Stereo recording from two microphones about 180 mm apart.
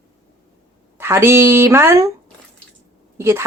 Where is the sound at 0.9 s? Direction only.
10° right (ahead or behind).